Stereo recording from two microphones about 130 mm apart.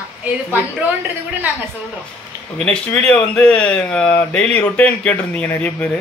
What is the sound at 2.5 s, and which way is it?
Speech, 5° left (ahead or behind).